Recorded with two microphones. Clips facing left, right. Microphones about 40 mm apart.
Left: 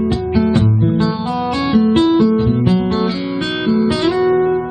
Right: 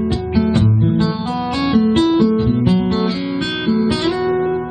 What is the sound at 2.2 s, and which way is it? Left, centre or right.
Guitar, centre.